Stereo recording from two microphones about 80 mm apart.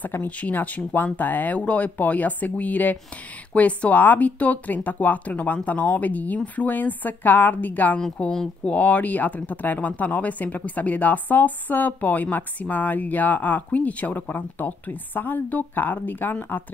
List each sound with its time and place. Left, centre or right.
0.0 s speech: left
8.0 s speech: centre; by 16.6 s left